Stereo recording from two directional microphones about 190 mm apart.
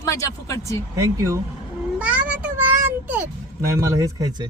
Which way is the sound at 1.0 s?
15° right (ahead or behind).